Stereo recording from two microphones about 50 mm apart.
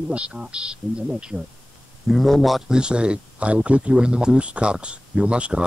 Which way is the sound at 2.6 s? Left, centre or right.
Centre.